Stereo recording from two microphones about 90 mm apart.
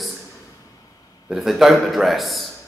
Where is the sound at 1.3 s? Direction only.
5° right (ahead or behind).